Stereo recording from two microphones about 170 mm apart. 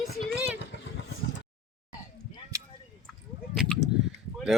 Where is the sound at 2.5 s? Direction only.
20° right (ahead or behind).